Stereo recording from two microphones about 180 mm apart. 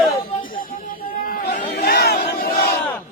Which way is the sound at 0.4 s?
50° left (ahead or behind).